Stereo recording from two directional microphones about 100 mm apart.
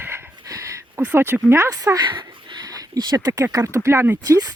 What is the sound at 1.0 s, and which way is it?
Speech, 20° right (ahead or behind).